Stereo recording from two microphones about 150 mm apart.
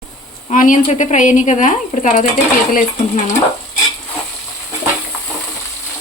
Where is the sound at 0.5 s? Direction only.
65° left (ahead or behind).